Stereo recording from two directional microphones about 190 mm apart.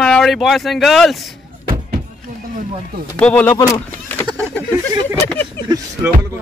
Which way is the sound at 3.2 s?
10° left (ahead or behind).